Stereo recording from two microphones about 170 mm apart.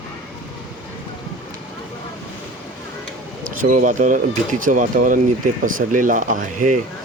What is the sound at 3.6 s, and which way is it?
Speech, 50° right (ahead or behind).